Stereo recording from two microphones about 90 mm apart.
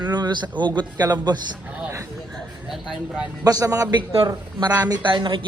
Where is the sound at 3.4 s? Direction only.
40° right (ahead or behind).